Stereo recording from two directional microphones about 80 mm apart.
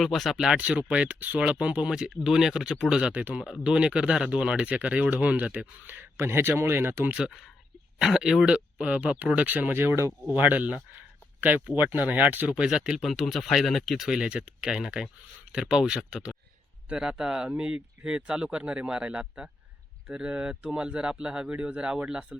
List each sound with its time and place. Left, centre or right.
0.0 s speech: centre
0.5 s speech: centre
7.9 s speech: centre